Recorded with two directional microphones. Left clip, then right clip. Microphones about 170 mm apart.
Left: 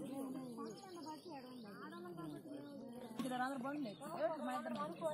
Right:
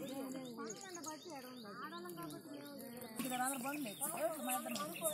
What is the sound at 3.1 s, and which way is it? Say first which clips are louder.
Speech: right 1 dB; 10° right (ahead or behind).